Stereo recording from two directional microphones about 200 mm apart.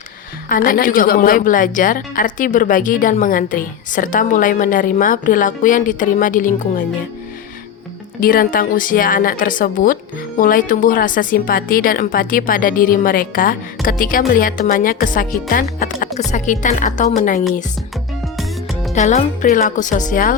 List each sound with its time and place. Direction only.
0.4 s a woman's voice: 45° left (ahead or behind)
8.2 s a woman's voice: 45° left (ahead or behind)
18.9 s a woman's voice: 35° left (ahead or behind)